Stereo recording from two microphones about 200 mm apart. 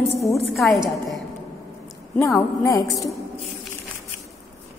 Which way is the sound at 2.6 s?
15° left (ahead or behind).